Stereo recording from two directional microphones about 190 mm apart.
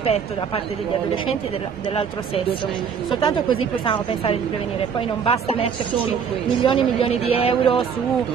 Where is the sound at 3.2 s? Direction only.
25° left (ahead or behind).